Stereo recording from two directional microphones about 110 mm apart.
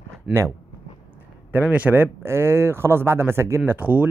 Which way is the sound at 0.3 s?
10° right (ahead or behind).